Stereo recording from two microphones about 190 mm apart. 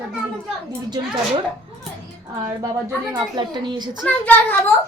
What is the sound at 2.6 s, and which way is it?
A woman's voice, 20° right (ahead or behind).